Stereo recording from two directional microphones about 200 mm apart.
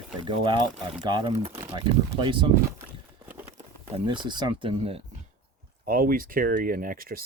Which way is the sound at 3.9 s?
25° right (ahead or behind).